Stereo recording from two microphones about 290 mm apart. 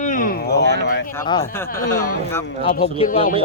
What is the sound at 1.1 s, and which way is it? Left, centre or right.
Speech, centre.